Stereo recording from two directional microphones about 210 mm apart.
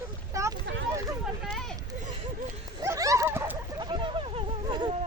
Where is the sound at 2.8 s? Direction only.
15° right (ahead or behind).